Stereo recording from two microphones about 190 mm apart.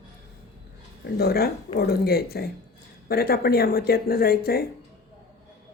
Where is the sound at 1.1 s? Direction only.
55° left (ahead or behind).